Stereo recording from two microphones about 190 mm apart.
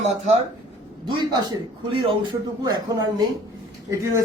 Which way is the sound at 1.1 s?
25° right (ahead or behind).